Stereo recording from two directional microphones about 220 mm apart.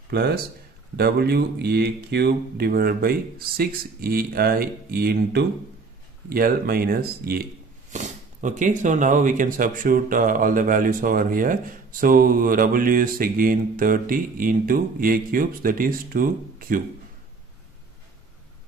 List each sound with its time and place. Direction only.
0.1 s speech: 45° right (ahead or behind)